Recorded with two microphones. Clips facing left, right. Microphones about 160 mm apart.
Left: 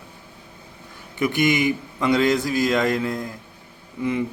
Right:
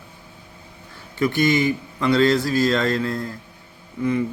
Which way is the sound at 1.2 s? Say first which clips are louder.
Right 1 dB; 15° left (ahead or behind).